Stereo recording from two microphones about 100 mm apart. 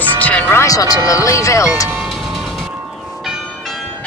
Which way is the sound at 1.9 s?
Centre (ahead or behind).